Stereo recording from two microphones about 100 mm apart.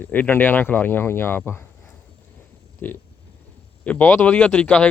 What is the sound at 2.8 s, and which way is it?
Speech, 20° left (ahead or behind).